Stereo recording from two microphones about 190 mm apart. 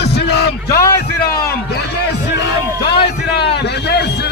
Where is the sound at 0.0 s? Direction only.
60° left (ahead or behind).